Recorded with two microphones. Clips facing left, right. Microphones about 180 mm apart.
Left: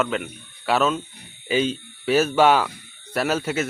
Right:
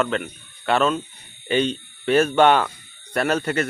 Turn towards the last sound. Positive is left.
turn(degrees=5)  # may be behind; listen again after turning